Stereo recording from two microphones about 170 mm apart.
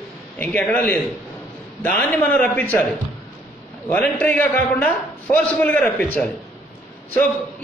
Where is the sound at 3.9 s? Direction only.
10° left (ahead or behind).